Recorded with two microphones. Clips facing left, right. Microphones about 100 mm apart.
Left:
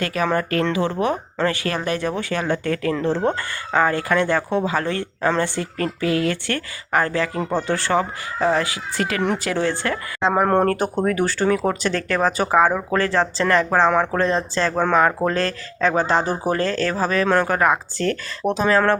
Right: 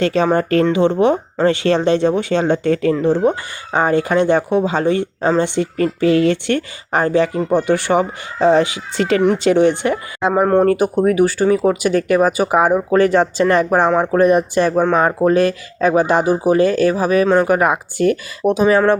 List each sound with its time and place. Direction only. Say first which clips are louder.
0.0 s speech: right 6 dB; 25° right (ahead or behind)